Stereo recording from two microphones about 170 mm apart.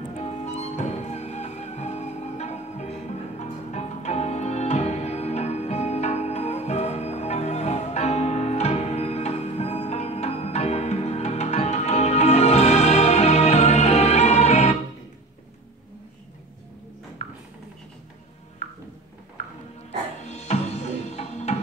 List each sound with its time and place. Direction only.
0.1 s music: 40° left (ahead or behind)
17.2 s music: 40° left (ahead or behind)
20.2 s music: 40° left (ahead or behind)